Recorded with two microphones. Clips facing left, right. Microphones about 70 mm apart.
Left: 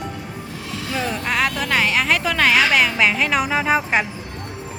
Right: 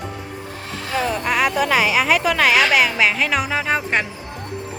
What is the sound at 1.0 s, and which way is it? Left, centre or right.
Speech, centre.